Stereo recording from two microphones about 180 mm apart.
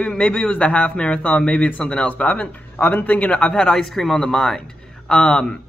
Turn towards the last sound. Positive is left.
turn(degrees=5)  # may be behind; listen again after turning